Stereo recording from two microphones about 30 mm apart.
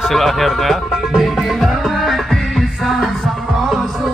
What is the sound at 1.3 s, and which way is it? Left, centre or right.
Music, centre.